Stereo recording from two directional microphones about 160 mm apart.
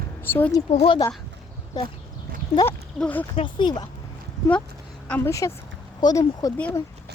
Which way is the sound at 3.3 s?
30° left (ahead or behind).